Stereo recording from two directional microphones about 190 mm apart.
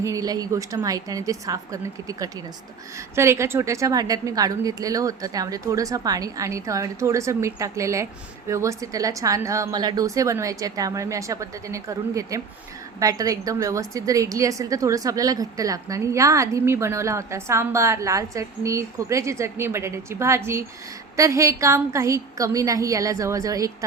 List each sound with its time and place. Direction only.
0.0 s a woman's voice: 20° right (ahead or behind)